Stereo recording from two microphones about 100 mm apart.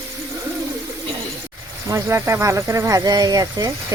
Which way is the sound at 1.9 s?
25° right (ahead or behind).